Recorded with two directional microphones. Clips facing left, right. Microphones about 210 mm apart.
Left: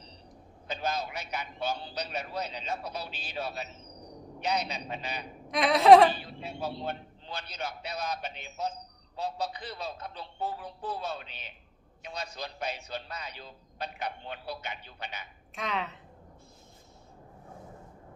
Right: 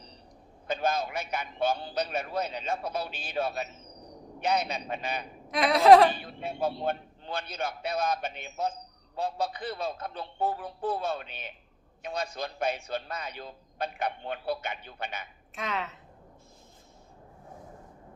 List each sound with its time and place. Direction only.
0.7 s a man's voice: 50° right (ahead or behind)
5.5 s a woman's voice: centre (ahead or behind)
6.1 s a man's voice: 50° right (ahead or behind)
15.5 s a woman's voice: centre (ahead or behind)